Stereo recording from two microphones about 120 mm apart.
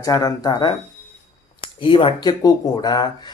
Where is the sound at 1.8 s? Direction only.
45° left (ahead or behind).